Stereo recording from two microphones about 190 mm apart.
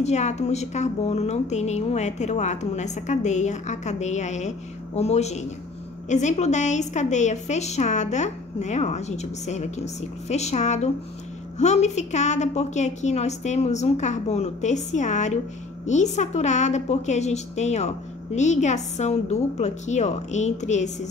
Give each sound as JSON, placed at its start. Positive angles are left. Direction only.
{"t": 0.0, "sound": "speech", "side_deg": 35}